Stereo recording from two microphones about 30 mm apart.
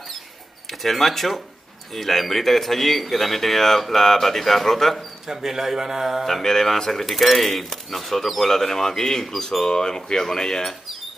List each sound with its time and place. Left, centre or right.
0.7 s speech: centre
4.9 s speech: centre
6.2 s speech: centre
9.7 s speech: left; by 11.0 s centre